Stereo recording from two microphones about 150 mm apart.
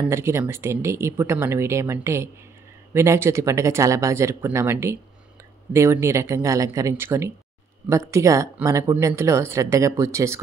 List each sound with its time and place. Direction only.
0.1 s speech: 20° right (ahead or behind)